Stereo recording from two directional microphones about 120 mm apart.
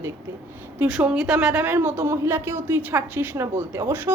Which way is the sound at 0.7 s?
10° right (ahead or behind).